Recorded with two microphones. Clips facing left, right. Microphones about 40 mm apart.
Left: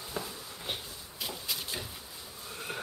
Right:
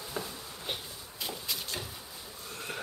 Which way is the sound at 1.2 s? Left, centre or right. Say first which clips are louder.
Even; centre.